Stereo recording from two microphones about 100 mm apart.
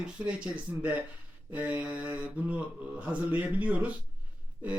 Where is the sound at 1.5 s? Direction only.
15° right (ahead or behind).